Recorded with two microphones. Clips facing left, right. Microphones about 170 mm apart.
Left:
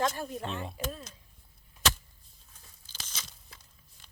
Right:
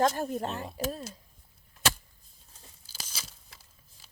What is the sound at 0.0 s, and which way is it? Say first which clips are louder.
Speech: right 5 dB; 40° right (ahead or behind).